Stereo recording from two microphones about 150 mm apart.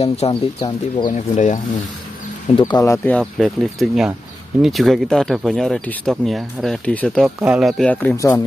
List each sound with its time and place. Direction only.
0.0 s speech: 45° left (ahead or behind)
0.6 s speech: 25° left (ahead or behind)
1.1 s speech: 55° left (ahead or behind)
2.6 s speech: 20° left (ahead or behind)
3.2 s speech: centre (ahead or behind)
7.4 s speech: 5° right (ahead or behind)